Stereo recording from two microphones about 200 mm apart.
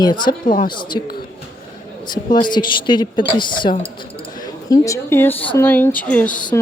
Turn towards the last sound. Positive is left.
turn(degrees=5)  # may be behind; listen again after turning